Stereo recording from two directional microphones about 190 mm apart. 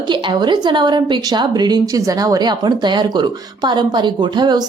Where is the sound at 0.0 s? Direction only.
25° right (ahead or behind).